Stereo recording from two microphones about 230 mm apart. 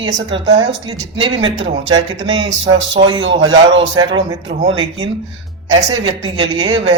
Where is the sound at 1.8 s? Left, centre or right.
Right.